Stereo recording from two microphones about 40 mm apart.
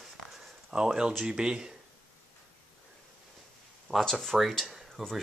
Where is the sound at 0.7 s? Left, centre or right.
Right.